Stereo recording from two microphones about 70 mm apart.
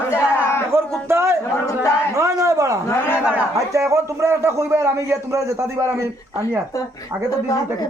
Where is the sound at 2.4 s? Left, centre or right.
Right.